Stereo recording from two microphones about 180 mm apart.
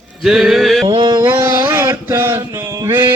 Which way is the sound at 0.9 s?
30° right (ahead or behind).